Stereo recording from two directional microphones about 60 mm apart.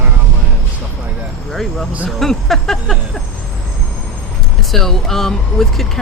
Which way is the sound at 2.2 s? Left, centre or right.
Centre.